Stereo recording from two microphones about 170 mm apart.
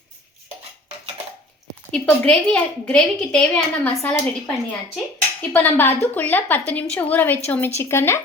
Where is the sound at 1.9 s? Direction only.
5° left (ahead or behind).